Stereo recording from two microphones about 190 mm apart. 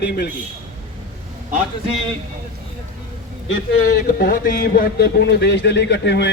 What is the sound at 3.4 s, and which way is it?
A man's voice, 55° left (ahead or behind).